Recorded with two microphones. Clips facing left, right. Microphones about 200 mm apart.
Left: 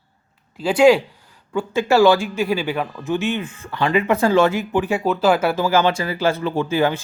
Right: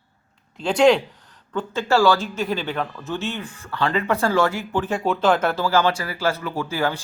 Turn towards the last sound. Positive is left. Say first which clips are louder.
# left 5 dB
turn(degrees=20)  # may be behind; listen again after turning